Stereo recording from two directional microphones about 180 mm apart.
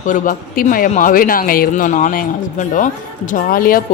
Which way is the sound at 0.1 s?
50° left (ahead or behind).